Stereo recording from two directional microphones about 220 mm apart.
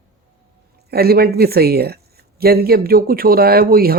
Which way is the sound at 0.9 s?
45° right (ahead or behind).